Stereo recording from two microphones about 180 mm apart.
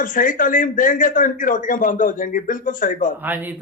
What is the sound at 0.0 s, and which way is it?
A man's voice, 45° left (ahead or behind).